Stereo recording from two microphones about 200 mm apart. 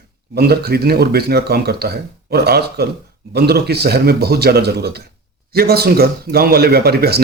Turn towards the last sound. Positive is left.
turn(degrees=-50)  # may be behind; listen again after turning